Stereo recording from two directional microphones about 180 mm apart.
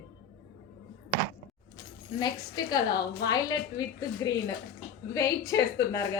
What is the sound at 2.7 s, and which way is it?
A woman's voice, 20° left (ahead or behind).